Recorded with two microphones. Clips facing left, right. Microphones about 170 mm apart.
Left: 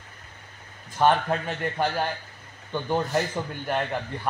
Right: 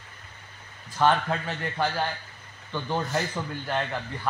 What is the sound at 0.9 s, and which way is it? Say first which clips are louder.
A man's voice: left 2 dB; 20° left (ahead or behind).